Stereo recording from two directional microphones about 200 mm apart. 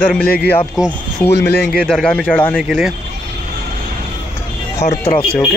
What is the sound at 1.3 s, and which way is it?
Speech, 55° left (ahead or behind).